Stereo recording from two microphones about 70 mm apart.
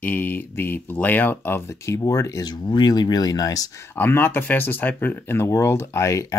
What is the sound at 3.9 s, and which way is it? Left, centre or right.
Speech, left.